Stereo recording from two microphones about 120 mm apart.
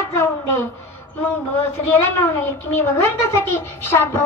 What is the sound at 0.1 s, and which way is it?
Speech, 20° left (ahead or behind).